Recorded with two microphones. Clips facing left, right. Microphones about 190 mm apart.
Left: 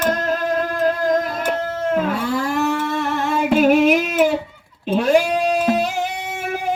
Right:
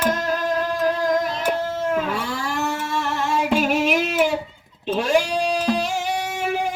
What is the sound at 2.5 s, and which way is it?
Music, 55° left (ahead or behind).